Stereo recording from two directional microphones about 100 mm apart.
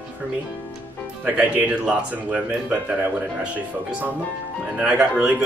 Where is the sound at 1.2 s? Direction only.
10° right (ahead or behind).